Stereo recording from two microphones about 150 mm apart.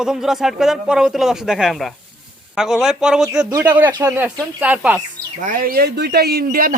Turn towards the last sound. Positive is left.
turn(degrees=-65)  # may be behind; listen again after turning